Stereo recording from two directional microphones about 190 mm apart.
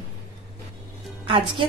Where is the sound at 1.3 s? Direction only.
30° right (ahead or behind).